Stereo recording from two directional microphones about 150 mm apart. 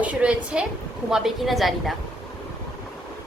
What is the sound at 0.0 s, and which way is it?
A woman's voice, 10° right (ahead or behind).